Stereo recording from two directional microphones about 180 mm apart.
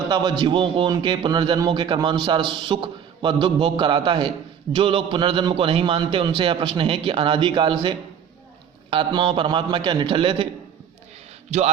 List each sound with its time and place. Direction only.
0.1 s a man's voice: 20° right (ahead or behind)
11.5 s a man's voice: 35° right (ahead or behind)